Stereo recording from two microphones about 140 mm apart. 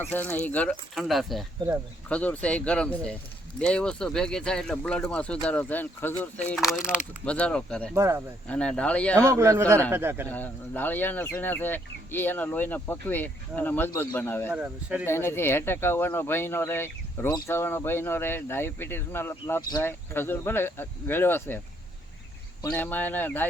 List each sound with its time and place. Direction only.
0.0 s speech: 10° left (ahead or behind)
6.6 s speech: 5° right (ahead or behind)
7.3 s speech: 10° left (ahead or behind)
7.9 s a man's voice: 20° right (ahead or behind)
8.4 s speech: 5° left (ahead or behind)
9.1 s a man's voice: 20° right (ahead or behind)
10.2 s speech: 10° left (ahead or behind)
14.5 s speech: 10° right (ahead or behind)
15.0 s speech: 15° left (ahead or behind)
17.2 s speech: 25° left (ahead or behind)
22.7 s speech: 10° left (ahead or behind)